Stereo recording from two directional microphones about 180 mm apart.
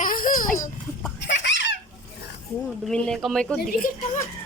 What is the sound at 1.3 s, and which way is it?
Giggle, 80° left.